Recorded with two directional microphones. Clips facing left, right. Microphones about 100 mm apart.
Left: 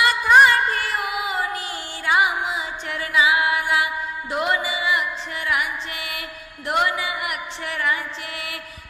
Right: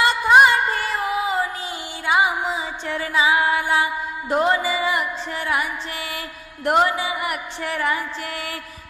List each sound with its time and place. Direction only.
0.0 s music: 25° right (ahead or behind); by 6.9 s 40° right (ahead or behind)
6.9 s music: 30° right (ahead or behind)